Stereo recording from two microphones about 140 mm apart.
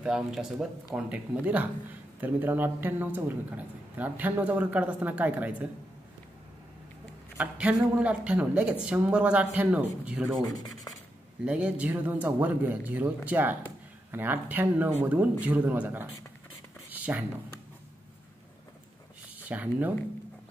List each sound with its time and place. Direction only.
0.0 s speech: 5° right (ahead or behind)
7.3 s speech: 10° right (ahead or behind)
10.4 s speech: 25° left (ahead or behind)
11.4 s speech: 5° right (ahead or behind)
16.9 s computer keyboard: 10° right (ahead or behind)
19.4 s speech: 10° right (ahead or behind)